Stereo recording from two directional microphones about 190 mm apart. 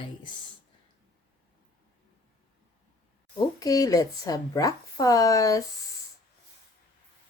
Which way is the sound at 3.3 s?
20° left (ahead or behind).